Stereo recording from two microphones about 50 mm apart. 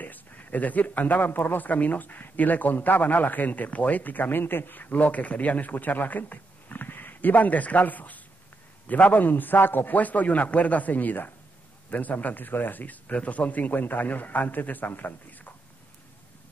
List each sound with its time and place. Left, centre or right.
0.0 s speech: left